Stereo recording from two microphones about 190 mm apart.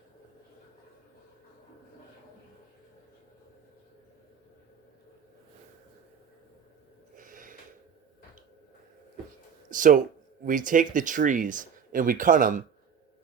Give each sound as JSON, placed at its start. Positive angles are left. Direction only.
{"t": 7.2, "sound": "snort", "side_deg": -45}
{"t": 9.6, "sound": "speech", "side_deg": -45}